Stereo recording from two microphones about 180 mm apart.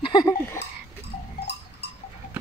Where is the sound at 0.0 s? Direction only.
25° left (ahead or behind).